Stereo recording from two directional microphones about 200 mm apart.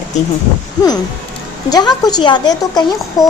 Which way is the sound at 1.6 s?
20° left (ahead or behind).